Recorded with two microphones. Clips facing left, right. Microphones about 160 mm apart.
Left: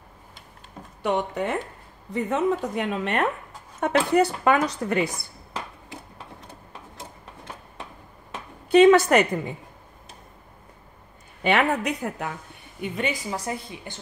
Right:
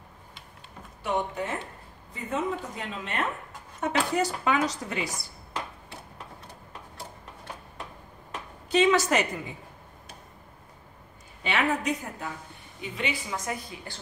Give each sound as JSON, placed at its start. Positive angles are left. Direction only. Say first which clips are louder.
{"t": 1.0, "sound": "a woman's voice", "louder": "left 4 dB", "side_deg": 65}
{"t": 8.6, "sound": "a woman's voice", "louder": "left 8 dB", "side_deg": 60}
{"t": 11.4, "sound": "a woman's voice", "louder": "left 5 dB", "side_deg": 60}
{"t": 12.9, "sound": "a woman's voice", "louder": "left 3 dB", "side_deg": 45}